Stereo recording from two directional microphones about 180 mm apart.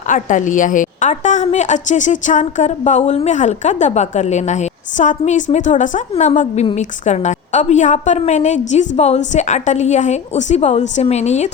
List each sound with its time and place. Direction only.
0.1 s a woman's voice: 45° left (ahead or behind)